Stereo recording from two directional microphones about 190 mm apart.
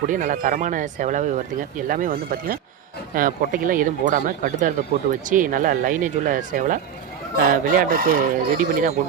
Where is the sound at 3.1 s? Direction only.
45° right (ahead or behind).